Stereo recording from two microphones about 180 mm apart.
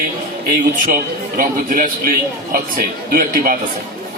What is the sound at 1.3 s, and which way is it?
Speech, 50° right (ahead or behind).